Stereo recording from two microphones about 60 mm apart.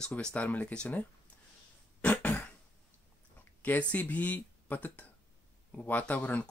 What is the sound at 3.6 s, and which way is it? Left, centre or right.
Speech, left.